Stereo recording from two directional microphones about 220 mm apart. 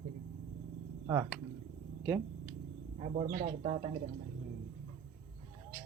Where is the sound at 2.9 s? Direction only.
35° right (ahead or behind).